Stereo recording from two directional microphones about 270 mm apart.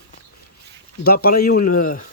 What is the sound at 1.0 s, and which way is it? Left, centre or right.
Speech, left.